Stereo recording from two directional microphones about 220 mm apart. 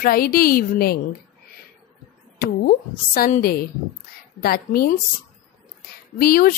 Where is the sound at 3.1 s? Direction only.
40° left (ahead or behind).